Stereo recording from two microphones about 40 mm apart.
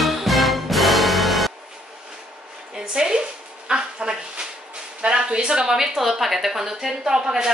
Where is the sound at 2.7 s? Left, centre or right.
Centre.